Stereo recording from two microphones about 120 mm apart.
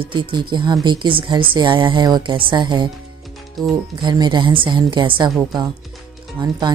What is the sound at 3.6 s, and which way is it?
Speech, centre (ahead or behind).